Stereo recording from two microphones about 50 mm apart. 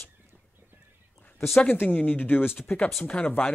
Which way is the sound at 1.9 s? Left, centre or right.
Left.